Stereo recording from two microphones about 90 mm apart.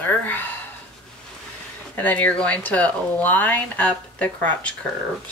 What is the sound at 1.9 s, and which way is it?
Speech, 20° left (ahead or behind).